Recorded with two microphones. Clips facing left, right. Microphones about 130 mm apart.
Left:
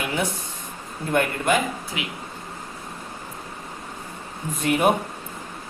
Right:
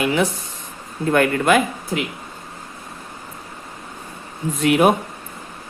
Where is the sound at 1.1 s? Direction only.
90° right.